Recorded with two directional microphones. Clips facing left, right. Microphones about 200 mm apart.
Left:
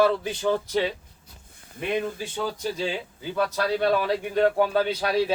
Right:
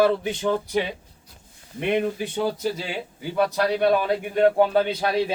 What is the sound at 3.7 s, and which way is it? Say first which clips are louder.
A man's voice: even; 20° right (ahead or behind).